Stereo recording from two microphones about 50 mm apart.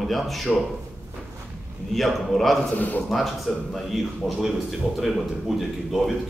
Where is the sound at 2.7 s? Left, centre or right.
Left.